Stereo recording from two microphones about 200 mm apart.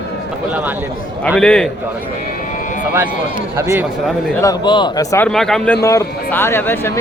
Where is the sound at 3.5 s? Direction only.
15° right (ahead or behind).